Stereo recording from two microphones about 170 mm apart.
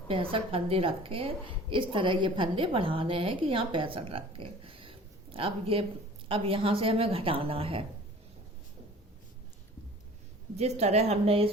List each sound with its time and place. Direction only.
0.1 s a woman's voice: 35° right (ahead or behind)
10.6 s a woman's voice: 40° right (ahead or behind)